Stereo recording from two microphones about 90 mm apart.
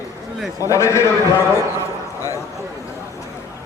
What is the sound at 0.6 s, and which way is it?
Speech, 35° left (ahead or behind).